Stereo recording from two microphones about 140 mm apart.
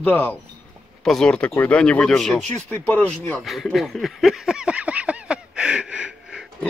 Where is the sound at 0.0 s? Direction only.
10° left (ahead or behind).